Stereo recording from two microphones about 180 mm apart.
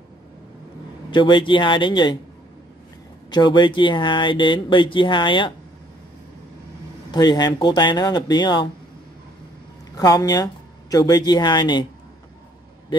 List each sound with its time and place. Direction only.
1.1 s speech: 25° left (ahead or behind)
3.3 s speech: 25° left (ahead or behind)
7.1 s speech: 25° left (ahead or behind)
9.9 s speech: 20° left (ahead or behind)